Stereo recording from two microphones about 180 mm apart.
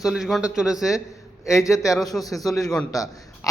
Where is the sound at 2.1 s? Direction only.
5° left (ahead or behind).